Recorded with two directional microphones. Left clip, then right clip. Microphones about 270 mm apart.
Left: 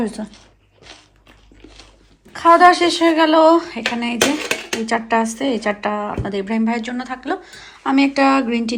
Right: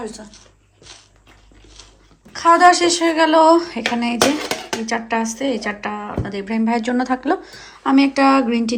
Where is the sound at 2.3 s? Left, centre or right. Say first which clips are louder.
Left 1 dB; centre.